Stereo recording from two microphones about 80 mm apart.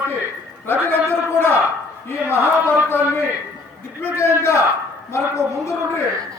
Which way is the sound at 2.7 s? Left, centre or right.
Left.